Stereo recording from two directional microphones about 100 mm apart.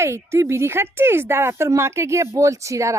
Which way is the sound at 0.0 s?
30° right (ahead or behind).